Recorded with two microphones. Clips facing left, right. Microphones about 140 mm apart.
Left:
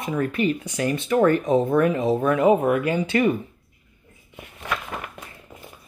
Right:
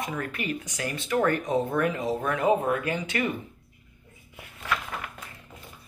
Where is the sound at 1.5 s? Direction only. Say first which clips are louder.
Left 6 dB; 25° left (ahead or behind).